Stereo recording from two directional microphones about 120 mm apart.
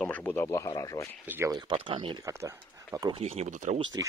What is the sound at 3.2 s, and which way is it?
Speech, 60° right (ahead or behind).